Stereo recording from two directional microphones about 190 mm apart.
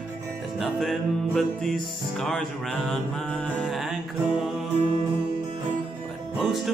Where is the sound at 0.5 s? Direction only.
Centre (ahead or behind).